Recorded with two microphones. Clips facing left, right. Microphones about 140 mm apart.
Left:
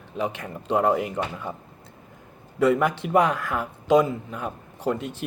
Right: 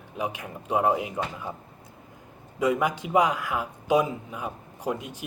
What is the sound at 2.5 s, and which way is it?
Speech, 10° right (ahead or behind).